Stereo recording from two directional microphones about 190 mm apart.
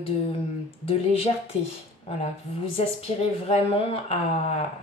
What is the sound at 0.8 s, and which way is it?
Speech, 30° left (ahead or behind).